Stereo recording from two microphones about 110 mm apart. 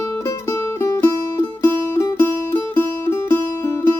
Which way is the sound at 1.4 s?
25° left (ahead or behind).